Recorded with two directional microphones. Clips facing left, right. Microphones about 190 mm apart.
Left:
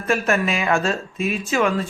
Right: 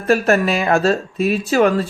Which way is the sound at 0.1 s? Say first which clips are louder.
Right 5 dB; 35° right (ahead or behind).